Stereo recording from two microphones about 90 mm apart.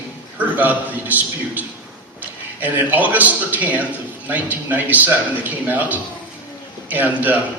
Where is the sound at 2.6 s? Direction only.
20° right (ahead or behind).